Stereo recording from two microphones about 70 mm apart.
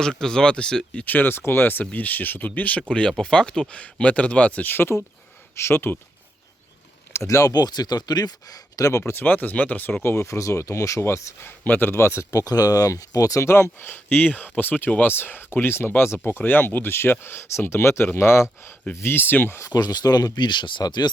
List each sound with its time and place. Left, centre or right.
0.0 s speech: centre
1.0 s speech: left
2.9 s speech: centre; by 6.0 s left
7.1 s speech: left
7.5 s speech: left
9.2 s speech: left
10.0 s speech: left
11.4 s speech: left
12.5 s speech: left
19.7 s speech: left